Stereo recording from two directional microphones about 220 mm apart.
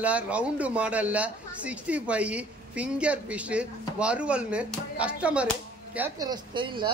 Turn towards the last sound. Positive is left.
turn(degrees=-20)  # may be behind; listen again after turning